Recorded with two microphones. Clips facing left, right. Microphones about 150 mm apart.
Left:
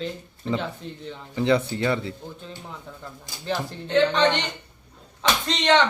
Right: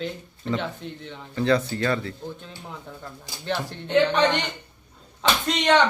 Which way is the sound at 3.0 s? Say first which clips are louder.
Even; centre (ahead or behind).